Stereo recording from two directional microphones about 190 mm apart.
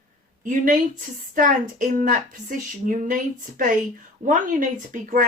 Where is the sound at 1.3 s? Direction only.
45° right (ahead or behind).